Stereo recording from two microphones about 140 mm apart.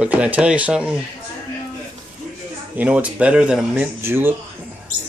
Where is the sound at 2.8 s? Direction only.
10° right (ahead or behind).